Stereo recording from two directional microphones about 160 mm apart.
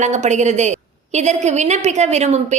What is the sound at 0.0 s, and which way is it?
A woman's voice, 45° right (ahead or behind).